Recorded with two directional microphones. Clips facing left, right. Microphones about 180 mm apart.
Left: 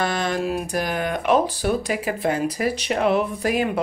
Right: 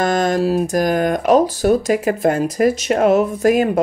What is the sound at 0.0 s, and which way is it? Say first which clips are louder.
Speech: right 7 dB; 45° right (ahead or behind).